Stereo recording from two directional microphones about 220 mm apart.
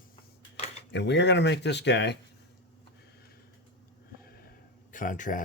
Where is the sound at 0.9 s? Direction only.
55° left (ahead or behind).